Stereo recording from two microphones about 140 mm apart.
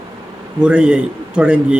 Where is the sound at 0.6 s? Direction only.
5° right (ahead or behind).